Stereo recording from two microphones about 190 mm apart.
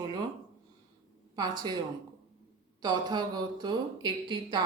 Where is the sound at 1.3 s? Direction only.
20° right (ahead or behind).